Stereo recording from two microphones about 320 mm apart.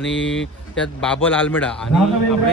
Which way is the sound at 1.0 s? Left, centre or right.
Centre.